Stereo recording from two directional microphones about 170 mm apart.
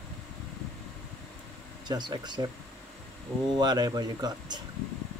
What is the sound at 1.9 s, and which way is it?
Speech, 25° right (ahead or behind).